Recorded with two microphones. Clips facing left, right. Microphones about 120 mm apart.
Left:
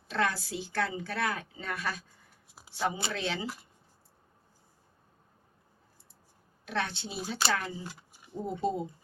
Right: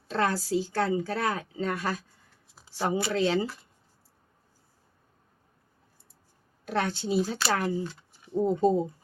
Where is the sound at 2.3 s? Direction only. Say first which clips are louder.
Left 1 dB; 15° left (ahead or behind).